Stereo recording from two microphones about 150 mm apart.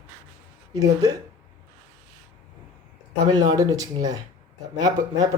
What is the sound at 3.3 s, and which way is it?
Speech, 25° right (ahead or behind).